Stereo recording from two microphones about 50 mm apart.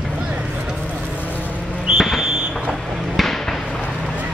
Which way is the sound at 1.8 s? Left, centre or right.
Centre.